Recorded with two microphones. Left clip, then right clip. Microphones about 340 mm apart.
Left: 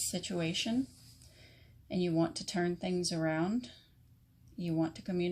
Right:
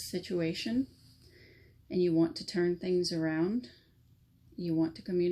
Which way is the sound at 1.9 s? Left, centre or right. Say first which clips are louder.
Right 4 dB; left.